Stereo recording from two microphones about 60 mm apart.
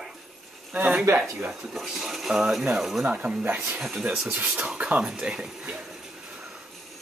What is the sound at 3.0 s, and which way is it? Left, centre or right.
Speech, right.